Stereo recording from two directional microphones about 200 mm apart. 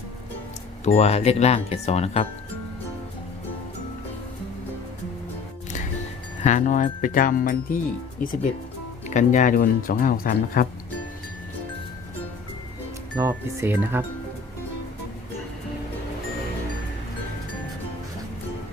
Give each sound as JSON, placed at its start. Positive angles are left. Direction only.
{"t": 0.9, "sound": "speech", "side_deg": 30}
{"t": 6.4, "sound": "speech", "side_deg": 40}
{"t": 9.0, "sound": "speech", "side_deg": 40}
{"t": 13.1, "sound": "speech", "side_deg": -15}